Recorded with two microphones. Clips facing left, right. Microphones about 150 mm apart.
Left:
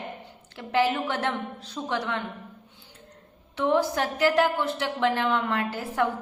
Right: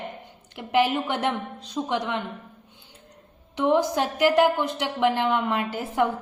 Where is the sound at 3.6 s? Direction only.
15° right (ahead or behind).